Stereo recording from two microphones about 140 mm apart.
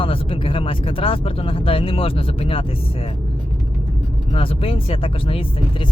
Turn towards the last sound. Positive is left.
turn(degrees=40)  # may be behind; listen again after turning